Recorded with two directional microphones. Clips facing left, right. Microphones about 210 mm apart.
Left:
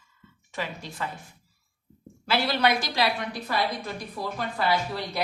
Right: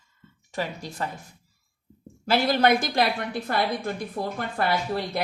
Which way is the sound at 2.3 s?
50° right (ahead or behind).